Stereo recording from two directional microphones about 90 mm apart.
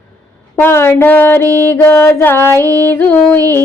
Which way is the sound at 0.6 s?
25° left (ahead or behind).